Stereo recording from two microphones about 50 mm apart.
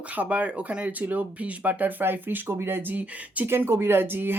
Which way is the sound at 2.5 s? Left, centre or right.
Right.